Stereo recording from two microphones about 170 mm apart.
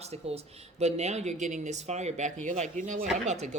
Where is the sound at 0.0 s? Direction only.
40° right (ahead or behind).